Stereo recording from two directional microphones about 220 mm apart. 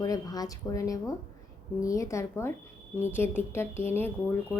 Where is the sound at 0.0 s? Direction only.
15° left (ahead or behind).